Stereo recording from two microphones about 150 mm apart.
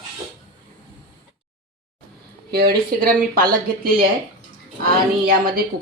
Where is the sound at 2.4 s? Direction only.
90° right.